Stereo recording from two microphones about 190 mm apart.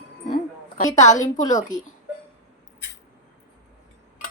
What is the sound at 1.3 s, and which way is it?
Speech, 40° left (ahead or behind).